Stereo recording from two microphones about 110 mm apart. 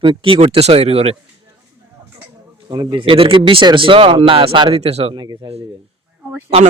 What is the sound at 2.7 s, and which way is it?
Speech, 45° right (ahead or behind).